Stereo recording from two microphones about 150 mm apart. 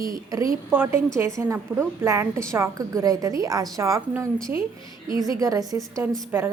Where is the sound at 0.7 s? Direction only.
15° right (ahead or behind).